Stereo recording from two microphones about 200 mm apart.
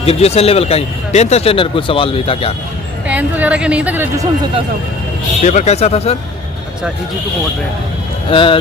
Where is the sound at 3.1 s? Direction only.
10° right (ahead or behind).